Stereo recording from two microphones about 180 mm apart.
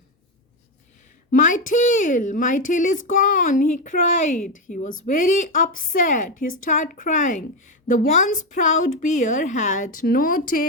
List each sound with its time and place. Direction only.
1.3 s a woman's voice: 45° left (ahead or behind)